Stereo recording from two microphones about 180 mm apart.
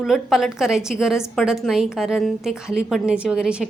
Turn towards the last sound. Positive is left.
turn(degrees=-5)  # may be behind; listen again after turning